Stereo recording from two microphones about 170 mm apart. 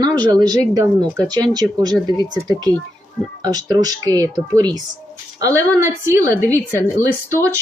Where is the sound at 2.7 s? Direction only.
10° left (ahead or behind).